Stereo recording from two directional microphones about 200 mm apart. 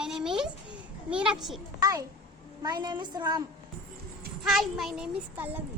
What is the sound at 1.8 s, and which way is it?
A woman's voice, 20° right (ahead or behind).